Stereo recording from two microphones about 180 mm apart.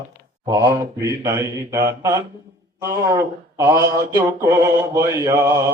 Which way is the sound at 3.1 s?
15° right (ahead or behind).